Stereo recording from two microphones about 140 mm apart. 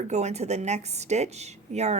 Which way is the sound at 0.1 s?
50° right (ahead or behind).